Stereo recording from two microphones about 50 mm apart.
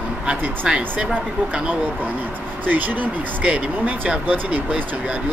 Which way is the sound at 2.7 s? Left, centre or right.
Right.